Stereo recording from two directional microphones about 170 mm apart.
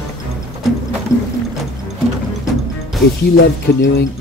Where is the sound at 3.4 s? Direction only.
80° left.